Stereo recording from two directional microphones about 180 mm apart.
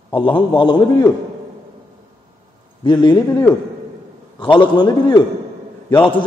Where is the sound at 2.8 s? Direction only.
25° left (ahead or behind).